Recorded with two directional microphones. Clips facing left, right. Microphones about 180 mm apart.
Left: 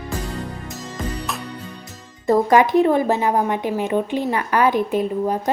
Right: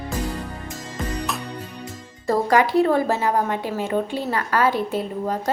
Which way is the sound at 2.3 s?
20° left (ahead or behind).